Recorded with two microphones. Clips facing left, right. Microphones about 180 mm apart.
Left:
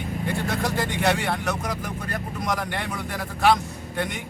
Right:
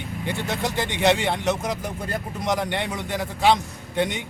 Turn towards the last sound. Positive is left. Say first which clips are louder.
# right 4 dB
turn(degrees=-20)  # may be behind; listen again after turning